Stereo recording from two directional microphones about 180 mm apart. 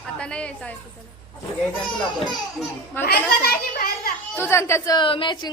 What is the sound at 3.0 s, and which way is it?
Speech, 60° left (ahead or behind).